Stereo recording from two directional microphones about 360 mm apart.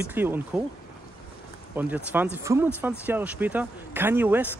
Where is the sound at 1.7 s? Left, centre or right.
Centre.